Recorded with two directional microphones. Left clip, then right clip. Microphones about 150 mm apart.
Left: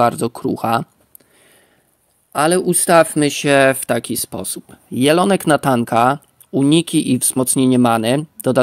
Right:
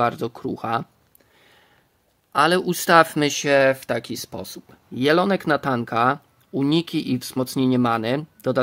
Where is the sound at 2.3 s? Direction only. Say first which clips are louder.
Left 3 dB; 5° left (ahead or behind).